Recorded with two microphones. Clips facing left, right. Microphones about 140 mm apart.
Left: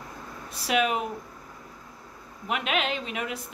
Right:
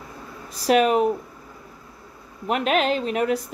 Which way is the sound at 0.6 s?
40° right (ahead or behind).